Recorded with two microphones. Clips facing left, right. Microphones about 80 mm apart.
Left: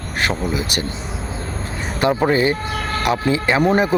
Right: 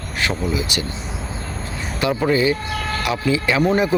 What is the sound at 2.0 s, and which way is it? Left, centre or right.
Speech, left.